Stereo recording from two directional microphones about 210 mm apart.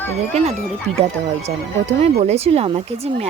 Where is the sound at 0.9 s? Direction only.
90° right.